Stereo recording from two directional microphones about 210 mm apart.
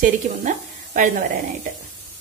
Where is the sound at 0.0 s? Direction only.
35° right (ahead or behind).